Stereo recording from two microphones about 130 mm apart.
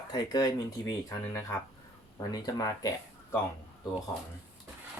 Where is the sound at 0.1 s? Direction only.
30° left (ahead or behind).